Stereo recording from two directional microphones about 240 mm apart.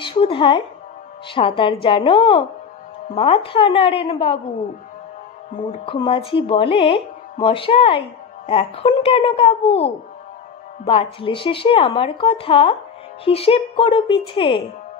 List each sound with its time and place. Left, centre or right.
0.0 s speech: left
5.7 s speech: left